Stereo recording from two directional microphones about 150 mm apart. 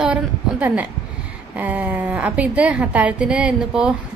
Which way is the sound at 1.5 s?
10° right (ahead or behind).